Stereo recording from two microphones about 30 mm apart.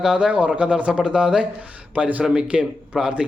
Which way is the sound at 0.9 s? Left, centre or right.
Right.